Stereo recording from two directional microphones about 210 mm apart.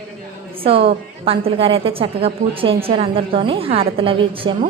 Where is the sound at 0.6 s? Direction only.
25° right (ahead or behind).